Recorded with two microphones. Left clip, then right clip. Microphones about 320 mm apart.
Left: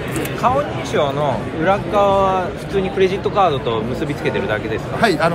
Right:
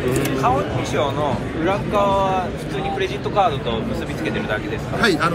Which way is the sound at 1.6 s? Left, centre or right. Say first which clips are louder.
Left 4 dB; left.